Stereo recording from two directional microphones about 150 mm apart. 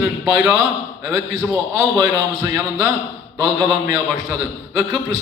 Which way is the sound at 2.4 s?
20° right (ahead or behind).